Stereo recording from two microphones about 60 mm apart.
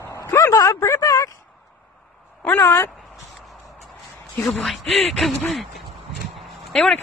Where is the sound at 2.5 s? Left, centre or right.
Left.